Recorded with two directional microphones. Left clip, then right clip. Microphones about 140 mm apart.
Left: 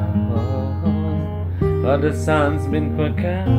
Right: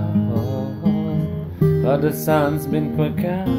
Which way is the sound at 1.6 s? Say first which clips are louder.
Even; 5° left (ahead or behind).